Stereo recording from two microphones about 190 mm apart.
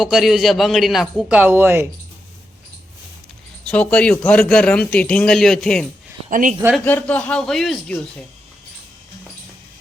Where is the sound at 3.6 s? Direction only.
5° left (ahead or behind).